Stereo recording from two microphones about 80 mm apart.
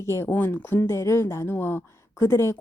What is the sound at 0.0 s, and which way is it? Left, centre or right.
A woman's voice, left.